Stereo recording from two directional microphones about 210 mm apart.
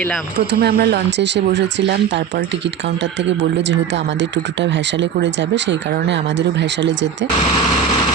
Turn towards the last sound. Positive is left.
turn(degrees=-60)  # may be behind; listen again after turning